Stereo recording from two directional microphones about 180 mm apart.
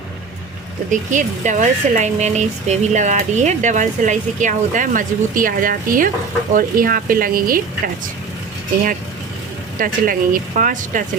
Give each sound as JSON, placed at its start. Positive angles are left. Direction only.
{"t": 0.9, "sound": "speech", "side_deg": -45}
{"t": 9.7, "sound": "speech", "side_deg": -50}